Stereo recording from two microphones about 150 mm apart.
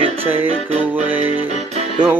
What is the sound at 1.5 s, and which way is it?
Music, 50° right (ahead or behind).